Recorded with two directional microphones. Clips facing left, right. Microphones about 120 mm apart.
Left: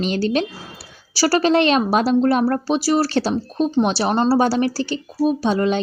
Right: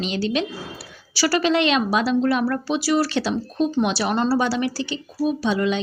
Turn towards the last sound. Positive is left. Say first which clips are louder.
# left 3 dB
turn(degrees=40)  # may be behind; listen again after turning